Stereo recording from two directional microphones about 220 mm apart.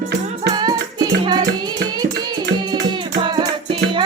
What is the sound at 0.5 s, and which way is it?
Music, 20° right (ahead or behind).